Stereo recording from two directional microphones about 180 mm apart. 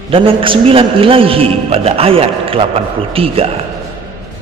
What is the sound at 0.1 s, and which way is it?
A man's voice, 30° right (ahead or behind).